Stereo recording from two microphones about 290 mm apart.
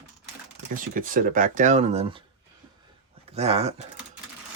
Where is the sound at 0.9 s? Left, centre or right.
Right.